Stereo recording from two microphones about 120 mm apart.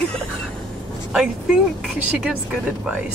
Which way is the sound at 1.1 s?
5° right (ahead or behind).